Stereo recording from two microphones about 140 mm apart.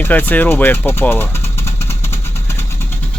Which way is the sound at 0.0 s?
15° left (ahead or behind).